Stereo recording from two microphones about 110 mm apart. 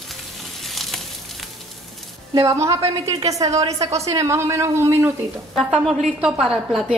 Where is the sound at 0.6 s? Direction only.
Centre (ahead or behind).